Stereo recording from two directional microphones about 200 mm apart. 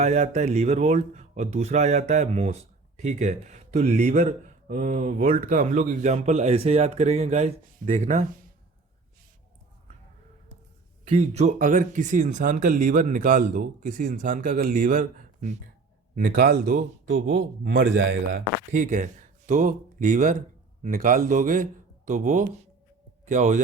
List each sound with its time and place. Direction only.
0.0 s speech: 35° right (ahead or behind)
11.1 s speech: 35° right (ahead or behind)
16.1 s a man's voice: 50° right (ahead or behind)
18.7 s speech: 40° right (ahead or behind)